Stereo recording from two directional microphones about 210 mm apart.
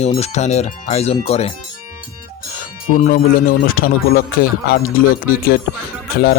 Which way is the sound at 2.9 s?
40° left (ahead or behind).